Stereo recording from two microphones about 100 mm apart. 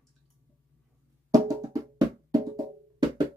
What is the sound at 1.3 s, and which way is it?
Music, 40° right (ahead or behind).